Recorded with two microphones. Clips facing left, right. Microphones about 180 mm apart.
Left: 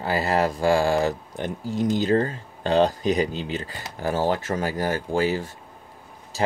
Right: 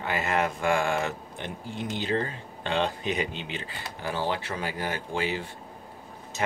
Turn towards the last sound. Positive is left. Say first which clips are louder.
# left 7 dB
turn(degrees=40)  # may be behind; listen again after turning